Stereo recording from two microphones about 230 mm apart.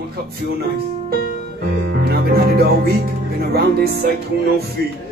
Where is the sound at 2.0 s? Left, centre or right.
Right.